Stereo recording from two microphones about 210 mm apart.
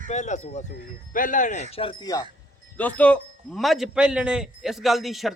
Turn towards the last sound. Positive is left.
turn(degrees=0)  # may be behind; listen again after turning